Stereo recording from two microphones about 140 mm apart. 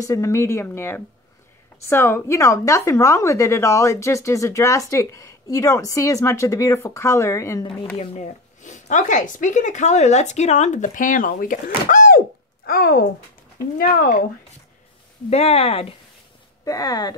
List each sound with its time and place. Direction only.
0.0 s a woman's voice: 20° left (ahead or behind)
8.0 s speech: 45° left (ahead or behind)
8.6 s speech: 60° left (ahead or behind); by 13.0 s 90° left
13.7 s speech: 75° left (ahead or behind)
15.2 s speech: 45° left (ahead or behind)
16.6 s a woman's voice: 25° left (ahead or behind)